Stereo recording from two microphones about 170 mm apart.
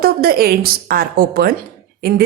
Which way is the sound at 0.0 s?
60° right (ahead or behind).